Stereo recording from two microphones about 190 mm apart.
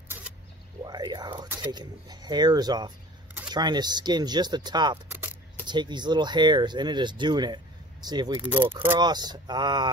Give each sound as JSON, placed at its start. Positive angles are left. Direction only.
{"t": 0.8, "sound": "speech", "side_deg": -20}
{"t": 5.1, "sound": "a sound", "side_deg": -10}
{"t": 5.7, "sound": "speech", "side_deg": -25}
{"t": 8.4, "sound": "speech", "side_deg": -10}
{"t": 9.0, "sound": "speech", "side_deg": -20}